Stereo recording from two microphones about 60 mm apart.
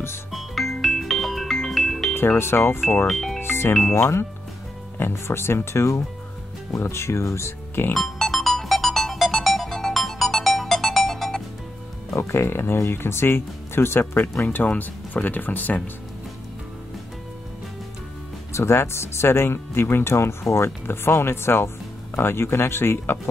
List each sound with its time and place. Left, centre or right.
0.3 s music: centre
2.1 s speech: left
3.1 s speech: centre
3.3 s music: left
3.9 s speech: left
7.9 s music: centre
12.2 s speech: left
14.6 s speech: left
18.5 s speech: left